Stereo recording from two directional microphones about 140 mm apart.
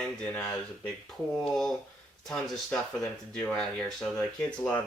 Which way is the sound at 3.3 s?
5° left (ahead or behind).